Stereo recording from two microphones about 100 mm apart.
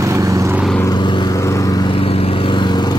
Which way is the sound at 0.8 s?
50° left (ahead or behind).